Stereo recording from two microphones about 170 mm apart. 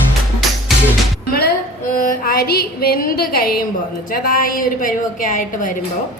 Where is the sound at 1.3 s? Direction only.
60° left (ahead or behind).